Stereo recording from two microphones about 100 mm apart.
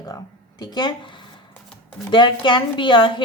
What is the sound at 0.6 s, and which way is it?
A woman's voice, 45° left (ahead or behind).